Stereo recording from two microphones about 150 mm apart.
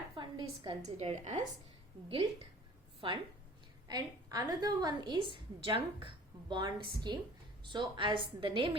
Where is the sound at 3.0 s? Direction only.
35° right (ahead or behind).